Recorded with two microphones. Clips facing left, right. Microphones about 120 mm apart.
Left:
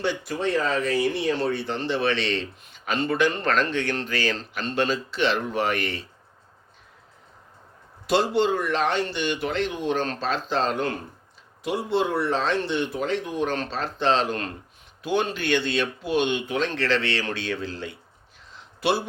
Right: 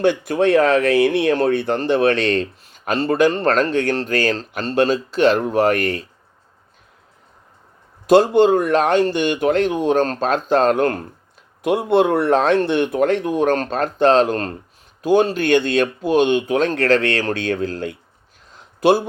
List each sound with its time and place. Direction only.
0.0 s speech: 55° right (ahead or behind)
8.0 s speech: 45° right (ahead or behind)
18.5 s a sound: 45° right (ahead or behind)